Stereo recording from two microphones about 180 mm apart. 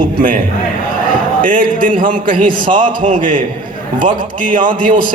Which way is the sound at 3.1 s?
45° right (ahead or behind).